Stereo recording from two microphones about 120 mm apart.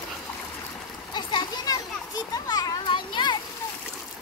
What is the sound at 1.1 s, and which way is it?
Children playing, 40° left (ahead or behind).